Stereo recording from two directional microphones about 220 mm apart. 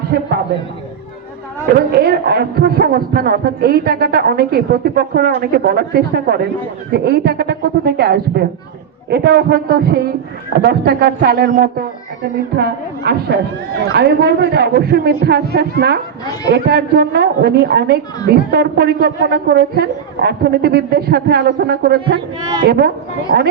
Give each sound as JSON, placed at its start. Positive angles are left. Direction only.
{"t": 0.1, "sound": "speech", "side_deg": -45}
{"t": 1.9, "sound": "speech", "side_deg": -45}
{"t": 23.3, "sound": "speech", "side_deg": -50}